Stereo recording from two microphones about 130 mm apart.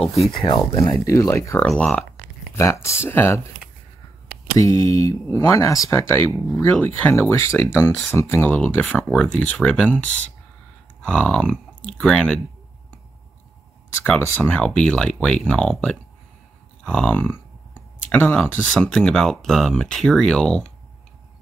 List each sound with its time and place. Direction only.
0.1 s speech: 50° left (ahead or behind)
0.5 s speech: 30° left (ahead or behind)
1.6 s speech: 5° left (ahead or behind)
2.5 s speech: 20° left (ahead or behind)
4.6 s speech: 25° left (ahead or behind)
7.9 s speech: 5° left (ahead or behind)
8.2 s speech: 15° left (ahead or behind)
11.1 s speech: 5° left (ahead or behind)
14.4 s speech: 10° left (ahead or behind)
16.8 s clicking: 10° left (ahead or behind)
18.5 s speech: 5° left (ahead or behind)